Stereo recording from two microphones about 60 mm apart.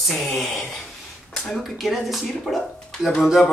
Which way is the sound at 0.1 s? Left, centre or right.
Centre.